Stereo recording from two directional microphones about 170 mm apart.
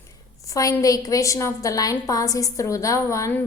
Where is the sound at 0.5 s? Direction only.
20° left (ahead or behind).